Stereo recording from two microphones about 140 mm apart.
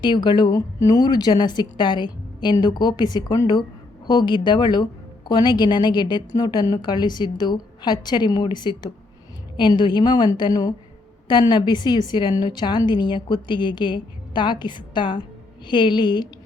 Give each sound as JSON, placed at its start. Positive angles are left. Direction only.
{"t": 0.0, "sound": "speech", "side_deg": 35}